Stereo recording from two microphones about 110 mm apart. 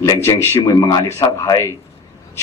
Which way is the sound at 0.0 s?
30° left (ahead or behind).